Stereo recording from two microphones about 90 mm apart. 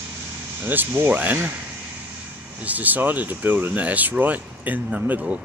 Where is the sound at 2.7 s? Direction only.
20° right (ahead or behind).